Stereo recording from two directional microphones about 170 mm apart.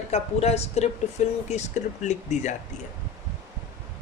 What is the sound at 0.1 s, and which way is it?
A woman's voice, 40° left (ahead or behind).